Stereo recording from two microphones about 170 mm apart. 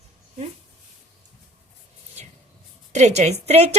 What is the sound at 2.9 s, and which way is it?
Speech, 40° right (ahead or behind).